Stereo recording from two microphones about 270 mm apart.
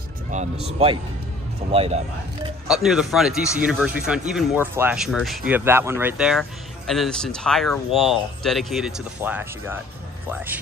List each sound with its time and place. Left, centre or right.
0.3 s speech: right
1.7 s speech: right
2.7 s speech: centre